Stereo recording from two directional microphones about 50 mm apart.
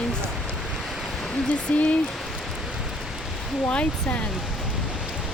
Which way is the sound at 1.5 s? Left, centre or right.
Left.